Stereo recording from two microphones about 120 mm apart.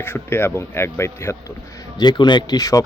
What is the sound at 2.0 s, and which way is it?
Speech, 40° left (ahead or behind).